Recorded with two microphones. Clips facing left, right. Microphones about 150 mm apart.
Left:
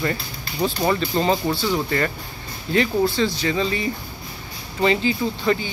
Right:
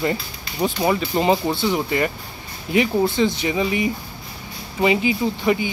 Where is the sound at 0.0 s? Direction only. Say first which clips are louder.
Right 2 dB; 20° right (ahead or behind).